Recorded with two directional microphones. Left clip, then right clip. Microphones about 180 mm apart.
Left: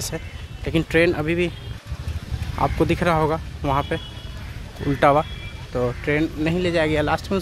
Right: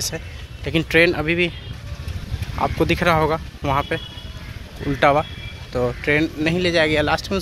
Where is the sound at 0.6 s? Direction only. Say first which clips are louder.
Right 2 dB; 5° left (ahead or behind).